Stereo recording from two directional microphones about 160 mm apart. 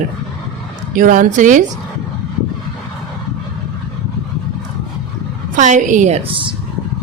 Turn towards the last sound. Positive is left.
turn(degrees=-45)  # may be behind; listen again after turning